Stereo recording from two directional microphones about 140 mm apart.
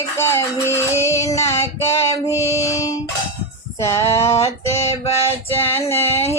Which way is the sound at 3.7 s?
20° left (ahead or behind).